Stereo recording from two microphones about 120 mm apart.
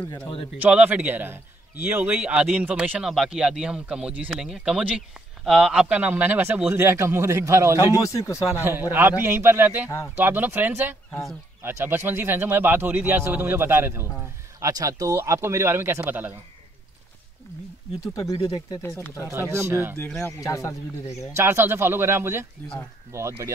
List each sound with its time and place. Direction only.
0.6 s speech: 15° right (ahead or behind)
7.8 s speech: 25° left (ahead or behind)
8.5 s speech: 15° right (ahead or behind)
9.8 s speech: 25° left (ahead or behind)
10.1 s speech: 15° right (ahead or behind)
14.6 s speech: 30° right (ahead or behind)
18.0 s speech: 30° left (ahead or behind)
18.8 s speech: 20° left (ahead or behind)
19.3 s speech: 20° right (ahead or behind)
20.2 s speech: 25° left (ahead or behind)
21.4 s speech: 20° right (ahead or behind)